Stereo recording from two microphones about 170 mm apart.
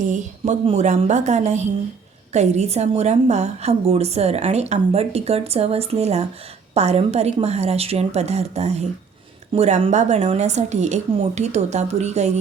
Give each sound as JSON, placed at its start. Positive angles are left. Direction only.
{"t": 0.0, "sound": "a woman's voice", "side_deg": -45}